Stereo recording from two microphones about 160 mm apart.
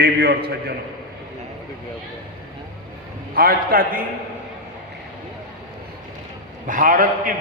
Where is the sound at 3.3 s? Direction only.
65° right (ahead or behind).